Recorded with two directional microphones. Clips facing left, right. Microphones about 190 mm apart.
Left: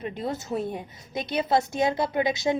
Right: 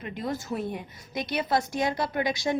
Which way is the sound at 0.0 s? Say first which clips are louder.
Left 2 dB; 25° left (ahead or behind).